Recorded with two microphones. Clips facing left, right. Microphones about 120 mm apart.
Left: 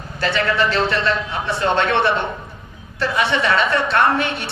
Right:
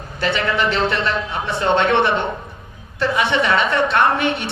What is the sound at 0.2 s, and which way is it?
A man's voice, 20° right (ahead or behind).